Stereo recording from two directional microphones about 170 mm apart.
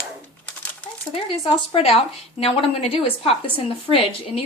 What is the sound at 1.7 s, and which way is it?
A woman's voice, 35° left (ahead or behind).